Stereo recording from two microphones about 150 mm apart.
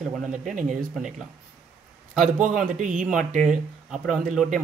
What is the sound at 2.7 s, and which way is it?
Speech, 60° right (ahead or behind).